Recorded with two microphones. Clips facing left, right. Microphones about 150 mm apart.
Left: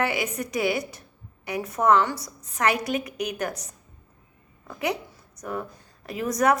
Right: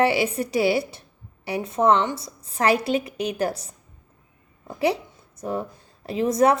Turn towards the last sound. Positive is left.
turn(degrees=-25)  # may be behind; listen again after turning